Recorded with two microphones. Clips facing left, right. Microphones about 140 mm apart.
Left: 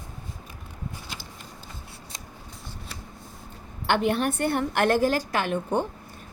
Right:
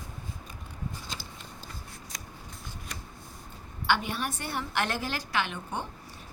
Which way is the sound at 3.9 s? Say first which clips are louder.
Left 6 dB; 55° left (ahead or behind).